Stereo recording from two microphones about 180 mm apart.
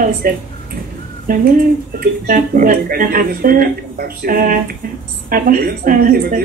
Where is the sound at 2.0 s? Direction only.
50° right (ahead or behind).